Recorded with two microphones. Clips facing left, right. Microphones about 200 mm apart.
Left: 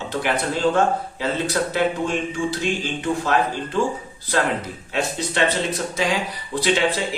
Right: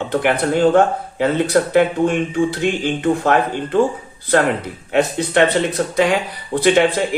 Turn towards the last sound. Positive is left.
turn(degrees=-55)  # may be behind; listen again after turning